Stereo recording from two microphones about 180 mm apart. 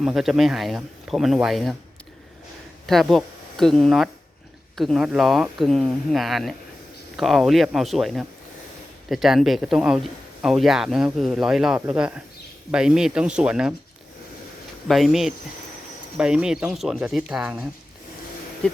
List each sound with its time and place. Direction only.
0.0 s speech: centre (ahead or behind)
2.8 s speech: centre (ahead or behind)
14.8 s speech: centre (ahead or behind)